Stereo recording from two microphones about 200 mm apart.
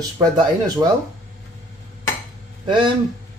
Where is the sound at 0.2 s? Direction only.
20° right (ahead or behind).